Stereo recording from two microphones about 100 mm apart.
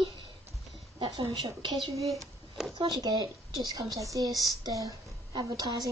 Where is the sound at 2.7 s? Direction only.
45° right (ahead or behind).